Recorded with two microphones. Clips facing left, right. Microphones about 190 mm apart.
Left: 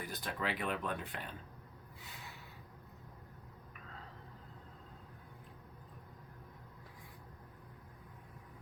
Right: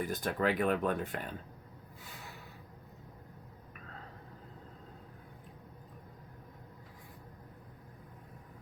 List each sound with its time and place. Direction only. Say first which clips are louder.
0.1 s speech: right 6 dB; 45° right (ahead or behind)